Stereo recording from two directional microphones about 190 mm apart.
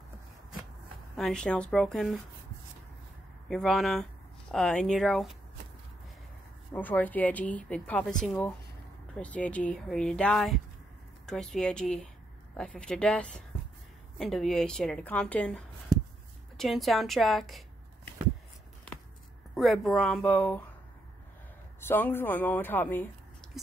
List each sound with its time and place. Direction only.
1.1 s speech: 5° left (ahead or behind)
3.4 s speech: centre (ahead or behind)
6.7 s speech: 10° left (ahead or behind)
15.9 s a sound: 20° right (ahead or behind)
16.5 s speech: centre (ahead or behind)
19.5 s speech: centre (ahead or behind)
21.7 s speech: 10° left (ahead or behind)
23.4 s a sound: 5° left (ahead or behind)